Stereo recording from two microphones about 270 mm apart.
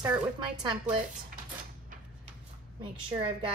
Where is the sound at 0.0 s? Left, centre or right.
Centre.